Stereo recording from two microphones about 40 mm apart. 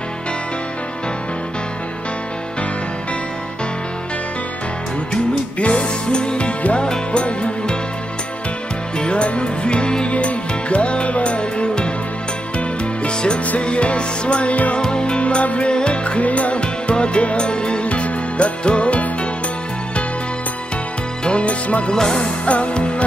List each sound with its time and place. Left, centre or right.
5.6 s music: left
8.9 s music: left
14.8 s music: left
21.2 s music: left
21.9 s music: centre
22.4 s music: left